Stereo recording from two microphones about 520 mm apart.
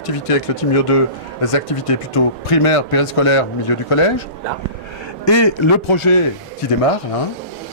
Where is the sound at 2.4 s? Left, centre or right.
Left.